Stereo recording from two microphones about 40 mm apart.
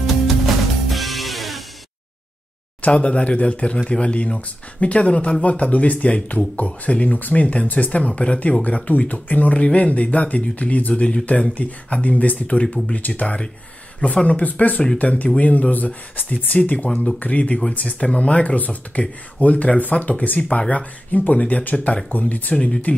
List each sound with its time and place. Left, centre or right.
0.8 s music: centre
2.8 s speech: left
12.5 s speech: left
12.9 s speech: left
20.3 s speech: left